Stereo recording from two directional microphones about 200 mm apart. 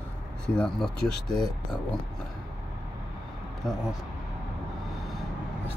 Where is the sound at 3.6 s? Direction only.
Centre (ahead or behind).